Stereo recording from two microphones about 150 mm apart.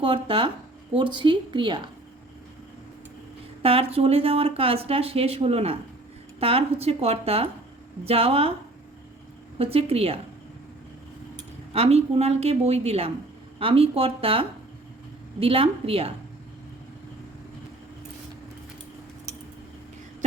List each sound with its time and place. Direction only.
0.0 s speech: 35° right (ahead or behind)
3.6 s speech: 40° right (ahead or behind)
9.6 s speech: 40° right (ahead or behind)
11.7 s a woman's voice: 45° right (ahead or behind)